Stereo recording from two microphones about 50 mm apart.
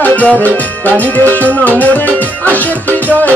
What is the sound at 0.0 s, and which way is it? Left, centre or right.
Music, left.